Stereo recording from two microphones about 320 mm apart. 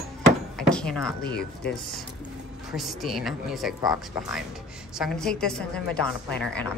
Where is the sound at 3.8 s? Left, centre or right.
Centre.